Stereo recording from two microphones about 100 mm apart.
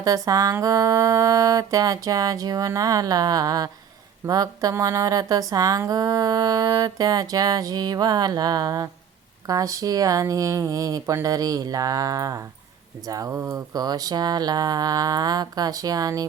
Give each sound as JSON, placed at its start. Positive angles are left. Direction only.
{"t": 0.0, "sound": "speech", "side_deg": -35}